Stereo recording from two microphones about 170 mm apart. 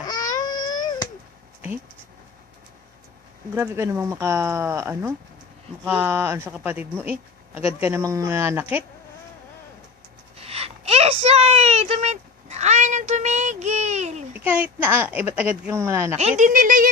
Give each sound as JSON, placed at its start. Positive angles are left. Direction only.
{"t": 0.0, "sound": "baby cry", "side_deg": 25}
{"t": 3.5, "sound": "speech", "side_deg": -15}
{"t": 7.6, "sound": "speech", "side_deg": 35}
{"t": 7.9, "sound": "speech", "side_deg": -15}
{"t": 10.3, "sound": "a sound", "side_deg": -35}
{"t": 14.3, "sound": "speech", "side_deg": -10}
{"t": 16.4, "sound": "speech", "side_deg": -50}